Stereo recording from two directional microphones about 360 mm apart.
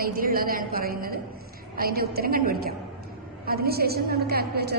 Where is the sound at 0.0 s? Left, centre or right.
Right.